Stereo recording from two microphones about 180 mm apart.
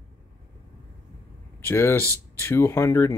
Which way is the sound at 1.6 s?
15° left (ahead or behind).